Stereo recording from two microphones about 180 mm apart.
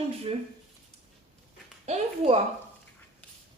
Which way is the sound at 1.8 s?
40° right (ahead or behind).